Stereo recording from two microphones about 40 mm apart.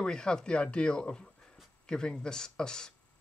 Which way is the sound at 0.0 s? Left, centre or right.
Centre.